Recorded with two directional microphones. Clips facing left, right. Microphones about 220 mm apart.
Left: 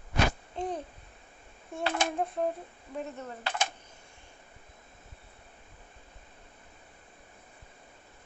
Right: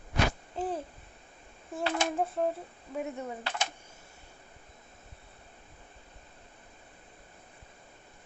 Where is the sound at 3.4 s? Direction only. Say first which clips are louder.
Left 2 dB; 50° left (ahead or behind).